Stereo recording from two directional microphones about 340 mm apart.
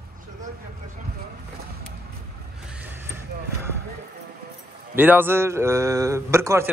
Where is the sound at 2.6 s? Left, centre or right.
Centre.